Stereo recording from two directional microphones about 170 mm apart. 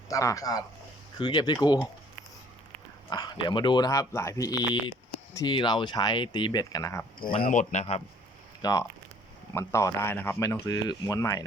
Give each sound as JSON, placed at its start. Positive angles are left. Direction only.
{"t": 0.1, "sound": "speech", "side_deg": 20}
{"t": 3.1, "sound": "speech", "side_deg": 25}
{"t": 7.4, "sound": "speech", "side_deg": 50}
{"t": 8.6, "sound": "speech", "side_deg": 20}